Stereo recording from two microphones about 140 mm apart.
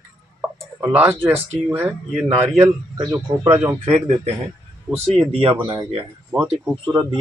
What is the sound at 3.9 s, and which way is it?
Speech, 50° right (ahead or behind).